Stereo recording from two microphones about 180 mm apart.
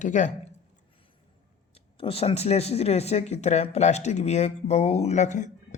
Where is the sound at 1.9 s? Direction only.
30° left (ahead or behind).